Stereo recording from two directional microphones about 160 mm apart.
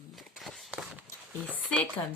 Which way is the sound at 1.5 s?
10° left (ahead or behind).